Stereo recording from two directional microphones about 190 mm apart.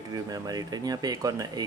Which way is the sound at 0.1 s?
20° right (ahead or behind).